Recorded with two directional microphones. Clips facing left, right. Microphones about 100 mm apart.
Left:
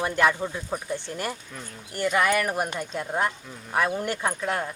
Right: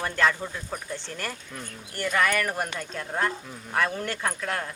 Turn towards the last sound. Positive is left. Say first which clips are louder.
# left 3 dB
turn(degrees=15)  # may be behind; listen again after turning